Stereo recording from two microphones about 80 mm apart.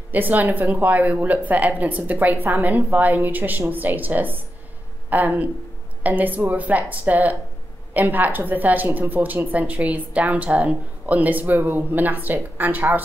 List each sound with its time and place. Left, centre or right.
0.1 s speech: right